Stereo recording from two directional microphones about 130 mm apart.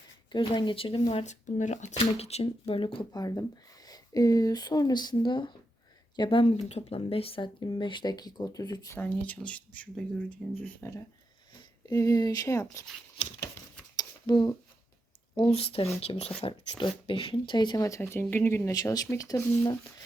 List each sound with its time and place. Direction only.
0.3 s speech: 35° left (ahead or behind)
3.1 s speech: 30° left (ahead or behind)
8.9 s speech: 10° left (ahead or behind); by 12.6 s 25° left (ahead or behind)
13.9 s a sound: 35° left (ahead or behind)
15.4 s speech: 50° left (ahead or behind); by 19.7 s 25° left (ahead or behind)